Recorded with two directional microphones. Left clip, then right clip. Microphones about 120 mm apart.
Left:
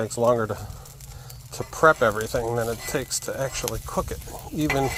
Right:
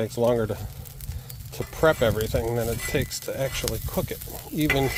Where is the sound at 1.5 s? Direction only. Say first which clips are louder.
Left 3 dB; 25° right (ahead or behind).